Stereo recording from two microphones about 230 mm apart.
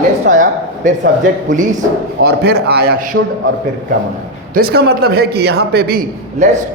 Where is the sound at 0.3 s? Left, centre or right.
Right.